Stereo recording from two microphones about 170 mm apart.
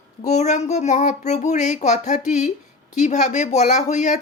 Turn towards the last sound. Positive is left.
turn(degrees=45)  # may be behind; listen again after turning